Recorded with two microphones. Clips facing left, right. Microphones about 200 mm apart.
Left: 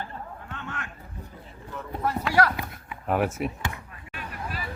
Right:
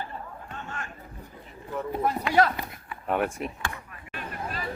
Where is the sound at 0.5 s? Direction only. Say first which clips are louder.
Left 1 dB; 65° left (ahead or behind).